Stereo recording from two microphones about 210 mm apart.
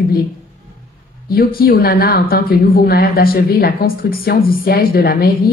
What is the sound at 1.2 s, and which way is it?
Speech, 45° left (ahead or behind).